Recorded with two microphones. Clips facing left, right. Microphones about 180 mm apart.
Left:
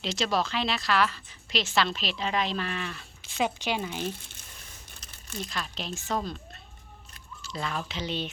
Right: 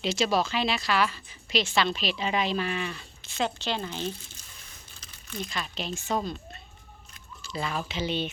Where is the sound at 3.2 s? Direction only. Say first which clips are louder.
Left 1 dB; 10° left (ahead or behind).